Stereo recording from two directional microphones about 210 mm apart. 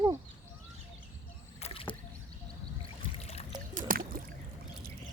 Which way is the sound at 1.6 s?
25° left (ahead or behind).